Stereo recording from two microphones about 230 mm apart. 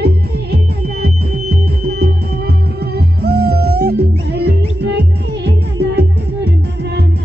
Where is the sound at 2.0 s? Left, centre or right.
Right.